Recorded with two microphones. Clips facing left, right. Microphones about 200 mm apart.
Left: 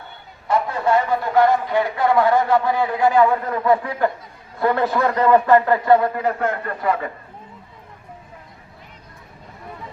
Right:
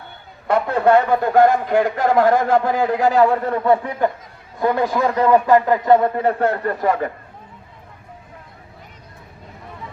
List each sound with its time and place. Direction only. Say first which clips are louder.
0.4 s a man's voice: right 4 dB; 60° right (ahead or behind); by 6.9 s 40° right (ahead or behind)